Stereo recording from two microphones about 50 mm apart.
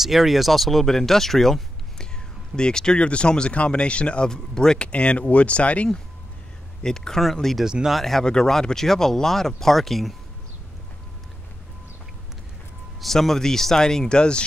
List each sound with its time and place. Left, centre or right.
0.0 s speech: centre; by 5.9 s left
6.8 s speech: centre
7.5 s speech: centre
7.9 s speech: centre
13.0 s speech: centre